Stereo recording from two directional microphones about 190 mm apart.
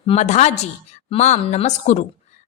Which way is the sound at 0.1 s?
35° left (ahead or behind).